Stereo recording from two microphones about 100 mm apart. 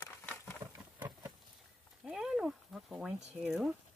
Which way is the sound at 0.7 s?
15° right (ahead or behind).